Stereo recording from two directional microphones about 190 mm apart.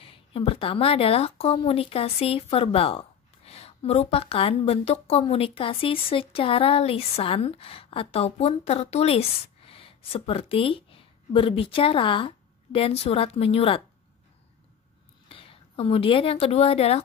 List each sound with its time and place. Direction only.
0.0 s a woman's voice: 30° left (ahead or behind)
15.2 s a woman's voice: 30° left (ahead or behind)